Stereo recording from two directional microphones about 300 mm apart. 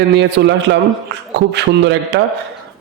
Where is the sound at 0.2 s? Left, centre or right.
Right.